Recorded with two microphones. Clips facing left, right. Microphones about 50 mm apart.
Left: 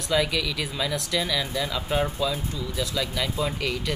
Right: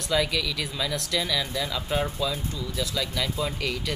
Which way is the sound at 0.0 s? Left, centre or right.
Centre.